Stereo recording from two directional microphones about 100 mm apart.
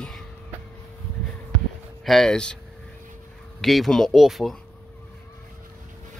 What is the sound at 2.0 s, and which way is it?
Speech, 5° left (ahead or behind).